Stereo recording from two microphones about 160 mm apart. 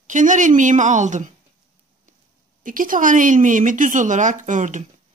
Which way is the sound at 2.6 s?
60° right (ahead or behind).